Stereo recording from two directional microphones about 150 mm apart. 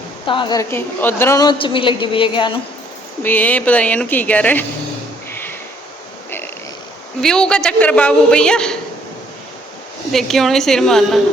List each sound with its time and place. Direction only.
0.3 s a woman's voice: 30° left (ahead or behind); by 1.4 s 15° left (ahead or behind)
1.4 s a woman's voice: 30° left (ahead or behind)
3.2 s speech: 10° left (ahead or behind)
7.2 s a man's voice: 5° left (ahead or behind)
10.1 s a man's voice: centre (ahead or behind)